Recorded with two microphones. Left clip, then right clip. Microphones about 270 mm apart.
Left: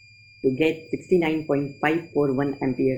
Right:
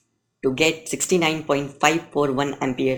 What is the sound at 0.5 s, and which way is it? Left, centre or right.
Speech, right.